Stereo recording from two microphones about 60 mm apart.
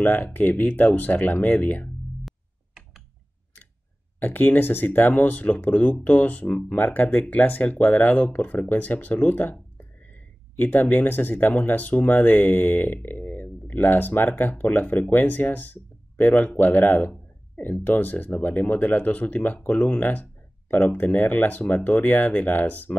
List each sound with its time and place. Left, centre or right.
0.0 s speech: left
2.2 s music: centre
4.2 s speech: left